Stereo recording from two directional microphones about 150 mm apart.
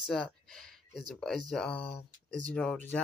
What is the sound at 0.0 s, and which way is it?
Speech, 5° left (ahead or behind).